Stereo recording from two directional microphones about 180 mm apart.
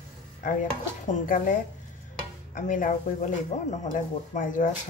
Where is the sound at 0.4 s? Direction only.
45° left (ahead or behind).